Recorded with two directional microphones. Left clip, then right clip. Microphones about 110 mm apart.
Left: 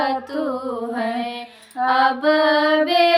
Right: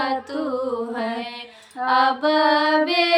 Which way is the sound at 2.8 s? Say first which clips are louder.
Left 4 dB; 15° right (ahead or behind).